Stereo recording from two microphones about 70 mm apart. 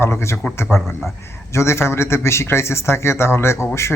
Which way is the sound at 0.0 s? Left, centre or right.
Left.